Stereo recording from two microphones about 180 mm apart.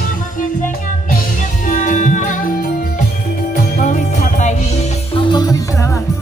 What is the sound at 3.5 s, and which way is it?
Jingle bell, 45° left (ahead or behind).